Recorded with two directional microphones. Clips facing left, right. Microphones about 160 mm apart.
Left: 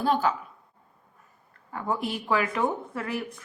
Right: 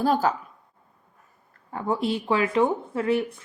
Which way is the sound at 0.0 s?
40° right (ahead or behind).